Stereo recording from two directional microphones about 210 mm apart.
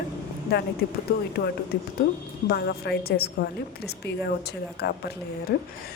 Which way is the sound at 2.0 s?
45° left (ahead or behind).